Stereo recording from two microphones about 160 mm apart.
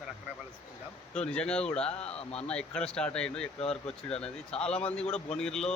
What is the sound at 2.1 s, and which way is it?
Speech, 40° left (ahead or behind).